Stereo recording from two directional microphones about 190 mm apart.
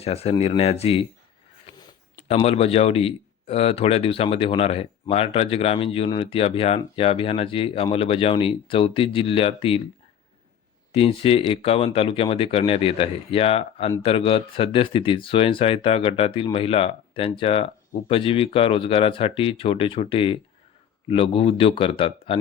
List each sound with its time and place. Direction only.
0.0 s a man's voice: 30° left (ahead or behind)
1.7 s a sound: 20° left (ahead or behind)
2.2 s a man's voice: 35° left (ahead or behind)
10.9 s speech: 30° left (ahead or behind)